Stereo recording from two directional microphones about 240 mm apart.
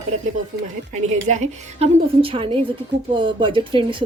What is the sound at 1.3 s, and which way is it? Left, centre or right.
A woman's voice, right.